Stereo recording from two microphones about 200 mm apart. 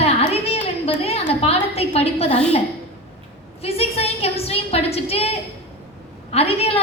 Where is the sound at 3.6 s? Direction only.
30° left (ahead or behind).